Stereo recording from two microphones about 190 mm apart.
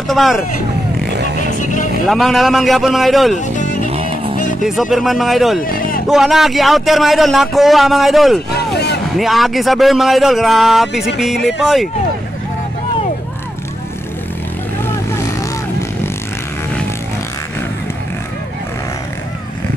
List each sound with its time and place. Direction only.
0.1 s a man's voice: centre (ahead or behind)
1.6 s speech: 40° left (ahead or behind)
2.0 s a man's voice: centre (ahead or behind)
3.3 s music: 40° left (ahead or behind)
3.9 s music: 30° right (ahead or behind)
4.4 s music: 45° left (ahead or behind)
4.6 s a man's voice: centre (ahead or behind)
5.7 s a sound: 50° left (ahead or behind)
6.0 s a man's voice: centre (ahead or behind)
8.5 s a sound: 60° left (ahead or behind)
9.1 s a man's voice: centre (ahead or behind)